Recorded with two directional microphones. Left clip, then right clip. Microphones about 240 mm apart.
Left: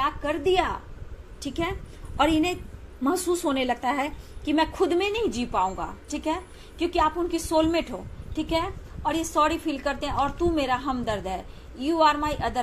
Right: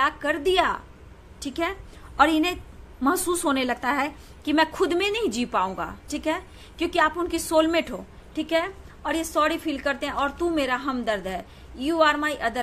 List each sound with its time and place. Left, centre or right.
0.0 s a woman's voice: right